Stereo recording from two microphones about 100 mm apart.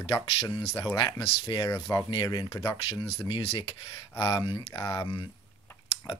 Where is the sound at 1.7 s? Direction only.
25° left (ahead or behind).